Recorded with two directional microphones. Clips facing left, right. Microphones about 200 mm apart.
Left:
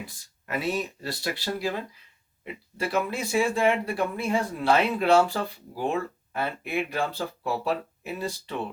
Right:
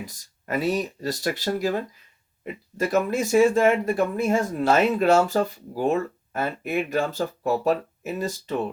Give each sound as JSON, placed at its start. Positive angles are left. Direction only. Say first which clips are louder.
{"t": 0.0, "sound": "speech", "louder": "right 3 dB", "side_deg": -40}